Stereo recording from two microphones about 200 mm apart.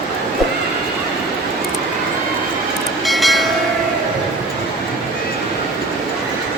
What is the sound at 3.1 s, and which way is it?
Train, centre (ahead or behind).